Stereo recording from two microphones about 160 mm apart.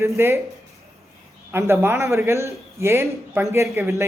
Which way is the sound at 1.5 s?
15° right (ahead or behind).